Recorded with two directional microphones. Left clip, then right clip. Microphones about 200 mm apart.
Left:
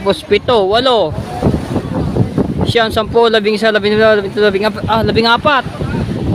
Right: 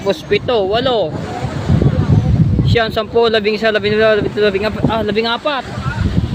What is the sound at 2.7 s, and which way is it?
Speech, 20° left (ahead or behind).